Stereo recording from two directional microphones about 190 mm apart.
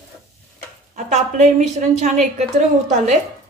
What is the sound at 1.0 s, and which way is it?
A woman's voice, 40° right (ahead or behind).